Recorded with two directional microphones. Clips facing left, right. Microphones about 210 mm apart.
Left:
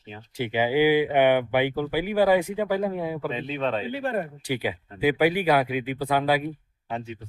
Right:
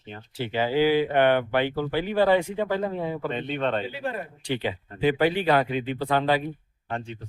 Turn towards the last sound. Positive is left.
turn(degrees=5)  # may be behind; listen again after turning